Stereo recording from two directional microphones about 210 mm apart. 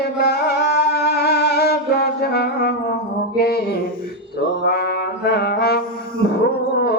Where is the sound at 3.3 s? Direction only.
45° left (ahead or behind).